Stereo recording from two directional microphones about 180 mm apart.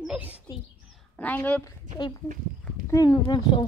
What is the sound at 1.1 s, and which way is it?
Speech, 10° left (ahead or behind).